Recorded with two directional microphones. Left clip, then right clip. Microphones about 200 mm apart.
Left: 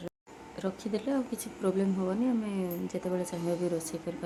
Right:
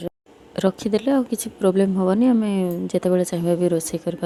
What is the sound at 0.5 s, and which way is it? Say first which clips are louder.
A woman's voice: right 13 dB; 40° right (ahead or behind).